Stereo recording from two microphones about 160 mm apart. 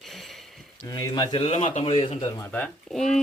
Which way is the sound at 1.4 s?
40° left (ahead or behind).